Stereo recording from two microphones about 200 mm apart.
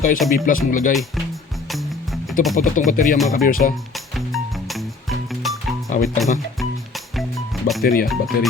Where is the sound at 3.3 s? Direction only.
45° left (ahead or behind).